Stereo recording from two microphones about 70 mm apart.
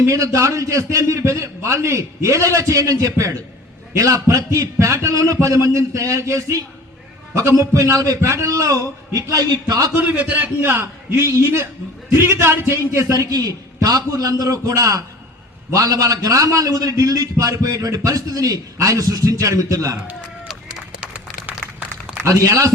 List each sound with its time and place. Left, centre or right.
0.0 s a man's voice: right
10.1 s a man's voice: right
10.6 s a man's voice: right
11.2 s a man's voice: right
13.1 s a man's voice: right
22.2 s a man's voice: right